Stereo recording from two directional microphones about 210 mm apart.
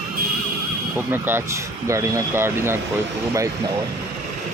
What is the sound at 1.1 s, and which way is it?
Speech, 10° right (ahead or behind).